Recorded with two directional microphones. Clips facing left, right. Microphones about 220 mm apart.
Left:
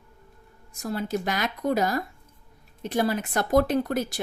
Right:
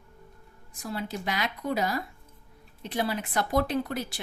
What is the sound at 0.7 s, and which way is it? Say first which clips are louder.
Speech: left 6 dB; 45° left (ahead or behind).